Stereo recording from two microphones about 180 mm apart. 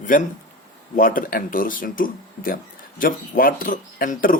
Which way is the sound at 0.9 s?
50° left (ahead or behind).